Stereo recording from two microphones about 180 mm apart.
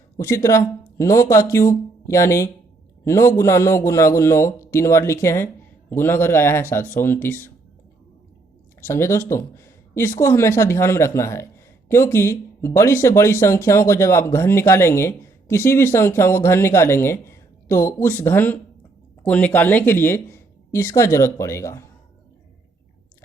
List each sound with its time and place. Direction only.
0.2 s speech: 15° left (ahead or behind)
8.9 s speech: 15° left (ahead or behind)